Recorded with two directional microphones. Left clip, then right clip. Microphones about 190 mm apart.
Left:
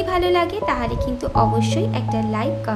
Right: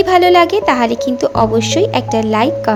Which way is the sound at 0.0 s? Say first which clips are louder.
Right 10 dB; 35° right (ahead or behind).